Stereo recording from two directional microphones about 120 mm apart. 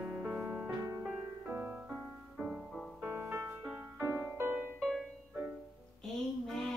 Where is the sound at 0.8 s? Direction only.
25° right (ahead or behind); by 2.9 s centre (ahead or behind).